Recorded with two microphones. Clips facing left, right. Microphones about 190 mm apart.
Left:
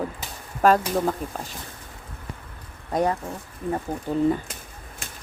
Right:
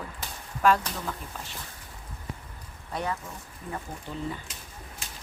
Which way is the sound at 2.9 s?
45° left (ahead or behind).